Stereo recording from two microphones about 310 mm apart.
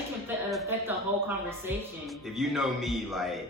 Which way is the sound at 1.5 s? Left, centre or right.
Centre.